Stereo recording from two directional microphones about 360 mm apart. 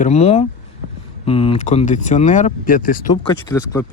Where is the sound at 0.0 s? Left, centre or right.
Centre.